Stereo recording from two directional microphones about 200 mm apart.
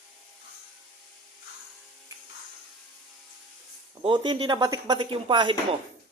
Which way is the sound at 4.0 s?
25° right (ahead or behind).